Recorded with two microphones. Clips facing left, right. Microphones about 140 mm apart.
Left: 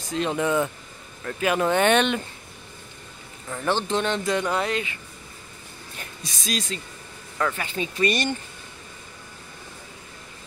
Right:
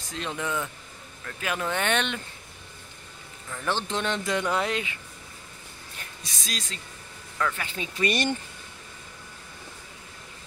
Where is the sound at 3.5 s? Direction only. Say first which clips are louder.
Left 5 dB; 25° left (ahead or behind).